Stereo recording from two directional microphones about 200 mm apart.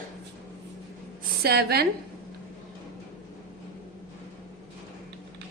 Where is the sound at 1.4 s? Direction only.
50° right (ahead or behind).